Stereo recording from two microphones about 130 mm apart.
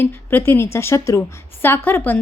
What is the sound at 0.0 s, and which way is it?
A woman's voice, 15° left (ahead or behind).